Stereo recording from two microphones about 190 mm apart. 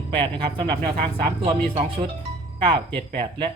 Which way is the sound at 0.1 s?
25° right (ahead or behind).